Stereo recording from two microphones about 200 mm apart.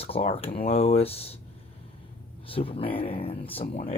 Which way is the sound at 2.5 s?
30° left (ahead or behind).